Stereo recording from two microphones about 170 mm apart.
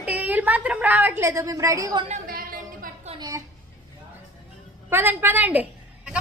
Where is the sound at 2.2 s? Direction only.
60° right (ahead or behind).